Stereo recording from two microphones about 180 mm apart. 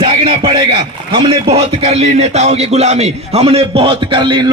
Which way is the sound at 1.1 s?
30° right (ahead or behind).